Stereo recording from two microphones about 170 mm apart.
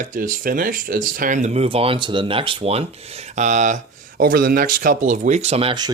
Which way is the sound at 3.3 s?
45° right (ahead or behind).